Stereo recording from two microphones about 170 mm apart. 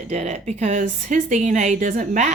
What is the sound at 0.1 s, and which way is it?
A woman's voice, 40° right (ahead or behind).